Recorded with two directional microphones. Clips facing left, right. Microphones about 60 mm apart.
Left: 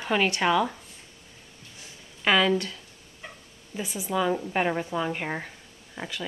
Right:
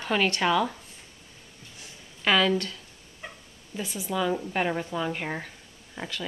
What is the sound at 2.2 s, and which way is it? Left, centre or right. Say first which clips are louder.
Speech: left 1 dB; centre.